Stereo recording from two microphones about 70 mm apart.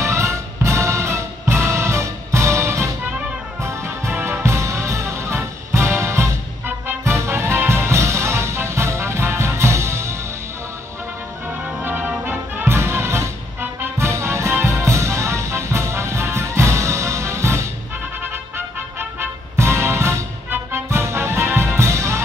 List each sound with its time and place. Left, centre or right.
0.0 s music: right
6.6 s music: right
7.2 s music: right
11.8 s music: right
18.9 s music: right